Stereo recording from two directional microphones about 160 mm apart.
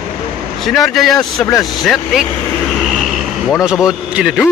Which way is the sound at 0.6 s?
Centre (ahead or behind).